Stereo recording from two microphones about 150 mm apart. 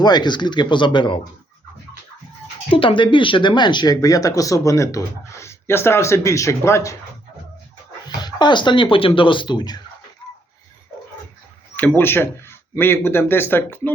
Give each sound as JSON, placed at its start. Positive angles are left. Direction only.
{"t": 0.0, "sound": "speech", "side_deg": 30}
{"t": 2.6, "sound": "speech", "side_deg": 35}
{"t": 8.2, "sound": "speech", "side_deg": 30}
{"t": 11.8, "sound": "speech", "side_deg": 15}